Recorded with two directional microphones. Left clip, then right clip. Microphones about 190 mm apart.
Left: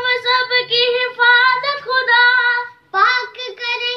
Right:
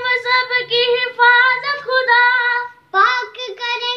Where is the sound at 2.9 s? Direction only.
20° right (ahead or behind).